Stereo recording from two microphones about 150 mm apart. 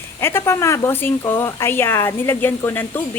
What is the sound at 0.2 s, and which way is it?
A woman's voice, 15° left (ahead or behind).